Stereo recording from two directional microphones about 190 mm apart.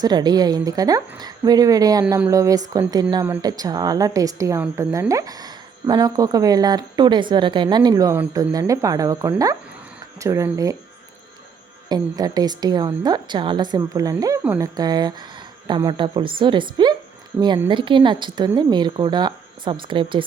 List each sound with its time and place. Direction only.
0.0 s a woman's voice: 20° right (ahead or behind)
11.9 s a woman's voice: 20° right (ahead or behind)